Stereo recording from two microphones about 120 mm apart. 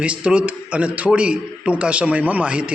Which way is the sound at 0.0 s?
10° right (ahead or behind).